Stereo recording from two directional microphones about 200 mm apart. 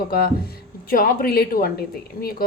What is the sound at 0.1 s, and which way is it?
A woman's voice, 50° left (ahead or behind).